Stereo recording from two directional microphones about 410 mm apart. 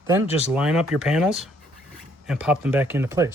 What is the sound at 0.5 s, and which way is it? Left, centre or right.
Speech, centre.